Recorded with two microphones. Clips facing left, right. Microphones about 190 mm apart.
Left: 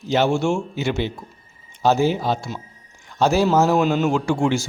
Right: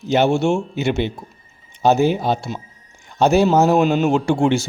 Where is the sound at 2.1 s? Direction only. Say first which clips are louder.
Right 2 dB; 20° right (ahead or behind).